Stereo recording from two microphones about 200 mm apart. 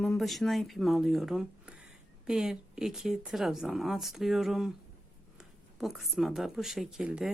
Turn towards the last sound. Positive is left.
turn(degrees=-5)  # may be behind; listen again after turning